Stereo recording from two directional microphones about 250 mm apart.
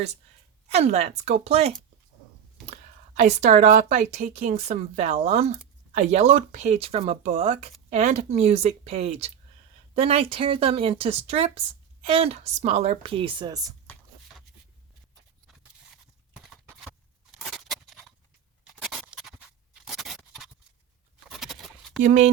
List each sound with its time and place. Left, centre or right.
0.7 s speech: right
3.2 s speech: right
17.3 s a sound: centre
22.0 s speech: right